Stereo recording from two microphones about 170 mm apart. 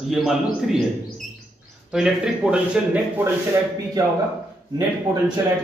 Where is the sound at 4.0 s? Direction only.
20° right (ahead or behind).